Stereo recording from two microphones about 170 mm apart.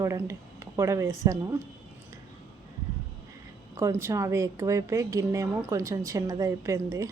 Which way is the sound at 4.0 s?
15° right (ahead or behind).